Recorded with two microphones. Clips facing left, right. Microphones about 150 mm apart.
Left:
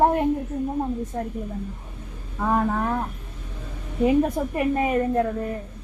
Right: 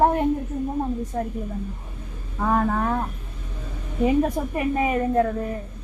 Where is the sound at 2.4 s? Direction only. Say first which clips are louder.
Right 1 dB; centre (ahead or behind).